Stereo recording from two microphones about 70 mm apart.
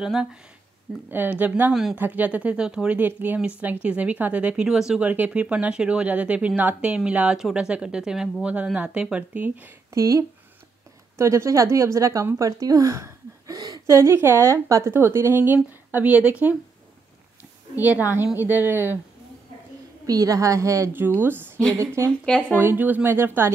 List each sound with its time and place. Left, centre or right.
0.0 s speech: centre
1.1 s speech: right
1.7 s speech: centre
2.0 s speech: right
4.6 s speech: centre
5.0 s speech: right
9.9 s speech: right
12.4 s a woman's voice: right; by 16.5 s centre
17.7 s speech: right
20.1 s speech: right
20.9 s speech: right
21.7 s a woman's voice: right
22.6 s speech: right